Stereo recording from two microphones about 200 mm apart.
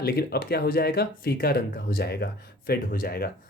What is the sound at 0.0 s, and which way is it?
Speech, 50° left (ahead or behind).